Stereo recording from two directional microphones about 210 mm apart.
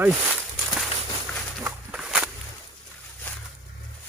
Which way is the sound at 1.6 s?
5° right (ahead or behind).